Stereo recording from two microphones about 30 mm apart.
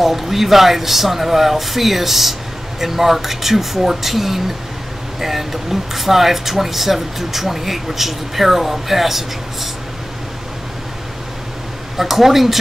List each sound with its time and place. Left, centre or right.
0.0 s speech: centre
12.0 s speech: centre